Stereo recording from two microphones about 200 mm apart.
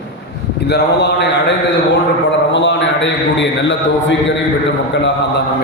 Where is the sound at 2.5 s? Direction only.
65° left (ahead or behind).